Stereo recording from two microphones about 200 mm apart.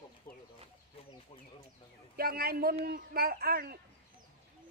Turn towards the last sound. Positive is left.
turn(degrees=-50)  # may be behind; listen again after turning